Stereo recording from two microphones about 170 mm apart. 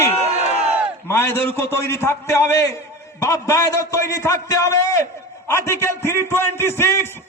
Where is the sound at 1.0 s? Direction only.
15° left (ahead or behind).